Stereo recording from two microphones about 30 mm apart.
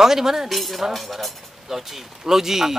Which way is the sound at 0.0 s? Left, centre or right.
Centre.